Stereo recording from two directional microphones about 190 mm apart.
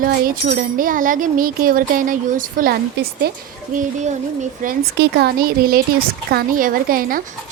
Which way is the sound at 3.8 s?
40° right (ahead or behind).